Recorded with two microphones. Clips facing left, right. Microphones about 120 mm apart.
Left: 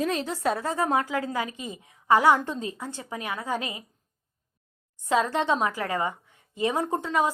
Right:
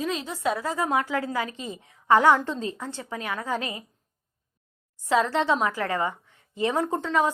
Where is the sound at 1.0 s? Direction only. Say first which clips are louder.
Right 1 dB; 20° left (ahead or behind).